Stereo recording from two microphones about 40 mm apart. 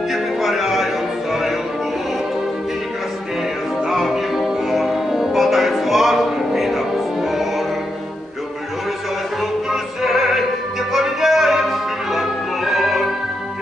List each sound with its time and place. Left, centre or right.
0.1 s music: centre
3.9 s music: centre
9.7 s music: centre